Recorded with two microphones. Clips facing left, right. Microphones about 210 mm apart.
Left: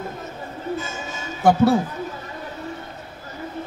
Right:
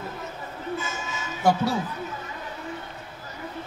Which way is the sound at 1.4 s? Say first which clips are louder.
Left 7 dB; 50° left (ahead or behind).